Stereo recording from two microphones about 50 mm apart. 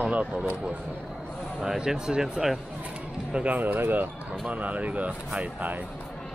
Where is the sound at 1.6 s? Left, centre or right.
Centre.